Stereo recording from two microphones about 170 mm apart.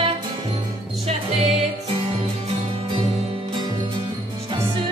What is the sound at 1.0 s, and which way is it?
Music, 40° right (ahead or behind).